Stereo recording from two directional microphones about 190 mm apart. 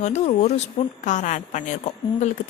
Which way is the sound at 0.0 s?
35° left (ahead or behind).